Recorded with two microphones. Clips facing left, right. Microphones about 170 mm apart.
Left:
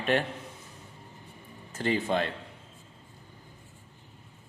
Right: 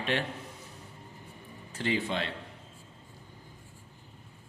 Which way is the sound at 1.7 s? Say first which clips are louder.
Left 3 dB; 45° left (ahead or behind).